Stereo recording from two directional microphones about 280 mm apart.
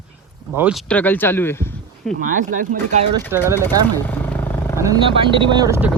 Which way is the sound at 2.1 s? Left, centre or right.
Right.